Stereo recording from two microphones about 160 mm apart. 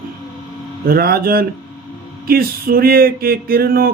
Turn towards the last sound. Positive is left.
turn(degrees=-65)  # may be behind; listen again after turning